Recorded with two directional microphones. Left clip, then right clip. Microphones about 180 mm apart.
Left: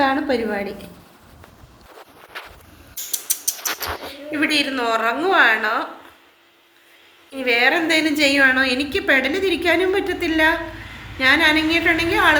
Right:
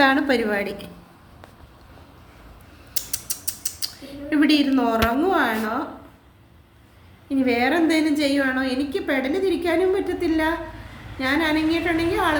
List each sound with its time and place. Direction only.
0.0 s a woman's voice: 15° right (ahead or behind)
3.2 s a sound: 15° right (ahead or behind)
4.4 s a woman's voice: 20° right (ahead or behind)
7.3 s a woman's voice: 15° right (ahead or behind)